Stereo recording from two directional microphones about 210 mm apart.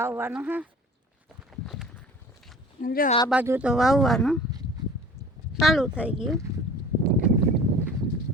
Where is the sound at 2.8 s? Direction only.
40° left (ahead or behind).